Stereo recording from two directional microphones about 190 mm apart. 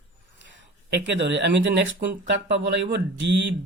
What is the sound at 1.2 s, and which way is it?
Speech, 65° right (ahead or behind).